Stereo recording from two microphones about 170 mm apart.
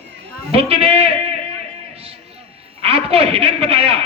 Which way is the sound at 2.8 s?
35° right (ahead or behind).